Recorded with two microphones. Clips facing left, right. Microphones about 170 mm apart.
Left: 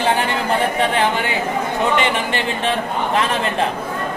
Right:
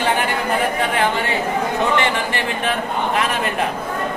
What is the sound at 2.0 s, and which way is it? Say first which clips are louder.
Speech: left 1 dB; 25° left (ahead or behind).